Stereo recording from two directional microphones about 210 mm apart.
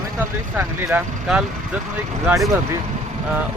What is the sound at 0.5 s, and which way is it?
Speech, 10° right (ahead or behind).